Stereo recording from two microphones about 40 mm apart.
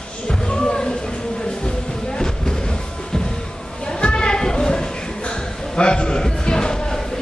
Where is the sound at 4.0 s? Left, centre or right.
Left.